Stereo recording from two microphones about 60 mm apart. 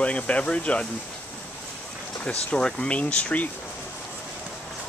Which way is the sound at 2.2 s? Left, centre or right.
Centre.